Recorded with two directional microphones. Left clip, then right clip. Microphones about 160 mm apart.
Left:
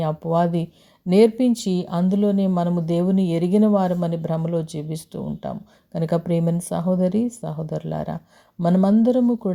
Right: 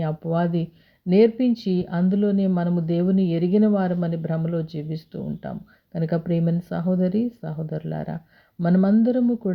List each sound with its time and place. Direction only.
0.0 s speech: 20° left (ahead or behind)